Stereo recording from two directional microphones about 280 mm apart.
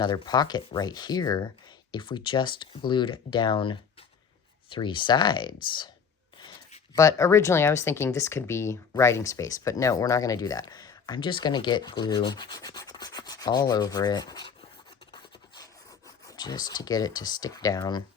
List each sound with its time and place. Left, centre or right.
0.0 s speech: centre
15.1 s filing: centre